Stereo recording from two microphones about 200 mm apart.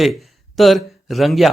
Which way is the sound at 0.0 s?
Centre (ahead or behind).